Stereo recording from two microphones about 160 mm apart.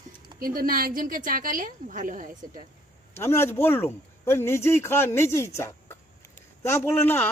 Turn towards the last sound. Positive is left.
turn(degrees=15)  # may be behind; listen again after turning